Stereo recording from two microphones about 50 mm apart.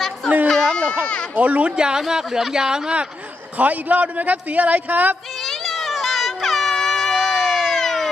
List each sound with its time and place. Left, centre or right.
0.4 s a sound: centre
1.0 s speech: left
1.4 s speech: right
3.6 s a man's voice: right
5.4 s music: centre
7.2 s crowd: centre
7.8 s a sound: centre